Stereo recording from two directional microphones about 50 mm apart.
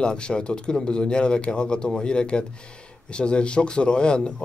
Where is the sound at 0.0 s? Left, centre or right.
Centre.